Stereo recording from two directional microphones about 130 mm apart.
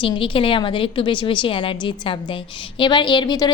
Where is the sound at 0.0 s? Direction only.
40° left (ahead or behind).